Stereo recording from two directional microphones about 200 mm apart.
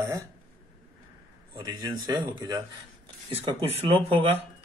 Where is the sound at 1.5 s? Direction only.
20° right (ahead or behind).